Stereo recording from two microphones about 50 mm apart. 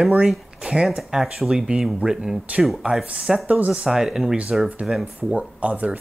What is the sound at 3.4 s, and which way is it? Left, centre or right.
Speech, right.